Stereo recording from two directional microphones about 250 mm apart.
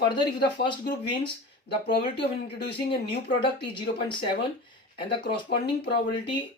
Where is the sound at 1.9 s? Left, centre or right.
Left.